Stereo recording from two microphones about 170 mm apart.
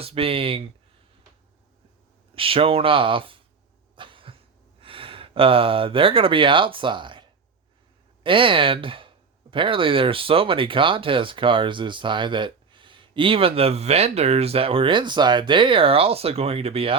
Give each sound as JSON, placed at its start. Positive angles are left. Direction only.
{"t": 0.0, "sound": "speech", "side_deg": -35}
{"t": 2.3, "sound": "speech", "side_deg": -30}
{"t": 3.9, "sound": "cough", "side_deg": -30}
{"t": 4.8, "sound": "speech", "side_deg": -30}